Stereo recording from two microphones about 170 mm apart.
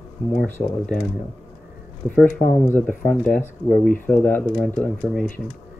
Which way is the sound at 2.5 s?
15° left (ahead or behind).